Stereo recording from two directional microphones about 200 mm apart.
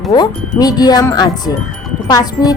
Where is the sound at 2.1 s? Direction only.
20° left (ahead or behind).